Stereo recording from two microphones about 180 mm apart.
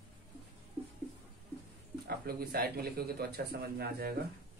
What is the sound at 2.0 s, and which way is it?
Speech, 60° right (ahead or behind).